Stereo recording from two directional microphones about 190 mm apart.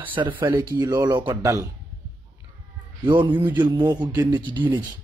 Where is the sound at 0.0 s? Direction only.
25° right (ahead or behind).